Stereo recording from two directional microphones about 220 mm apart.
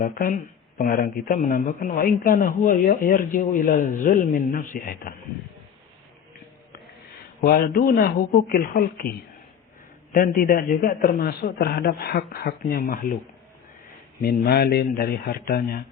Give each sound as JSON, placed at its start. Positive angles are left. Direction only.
{"t": 0.0, "sound": "speech", "side_deg": 40}
{"t": 7.4, "sound": "speech", "side_deg": 40}
{"t": 14.2, "sound": "speech", "side_deg": 45}